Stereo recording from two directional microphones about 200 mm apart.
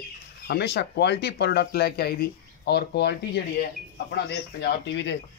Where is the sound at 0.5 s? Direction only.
55° left (ahead or behind).